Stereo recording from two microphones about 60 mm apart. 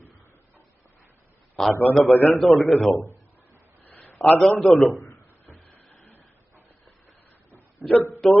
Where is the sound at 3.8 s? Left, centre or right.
Left.